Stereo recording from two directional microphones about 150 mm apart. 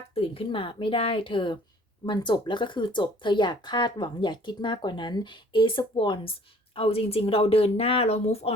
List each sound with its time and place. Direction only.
0.1 s speech: 40° left (ahead or behind)